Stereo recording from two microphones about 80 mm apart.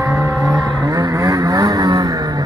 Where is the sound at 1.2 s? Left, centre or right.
Right.